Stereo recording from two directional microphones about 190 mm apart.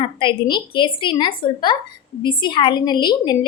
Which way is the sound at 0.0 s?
25° left (ahead or behind).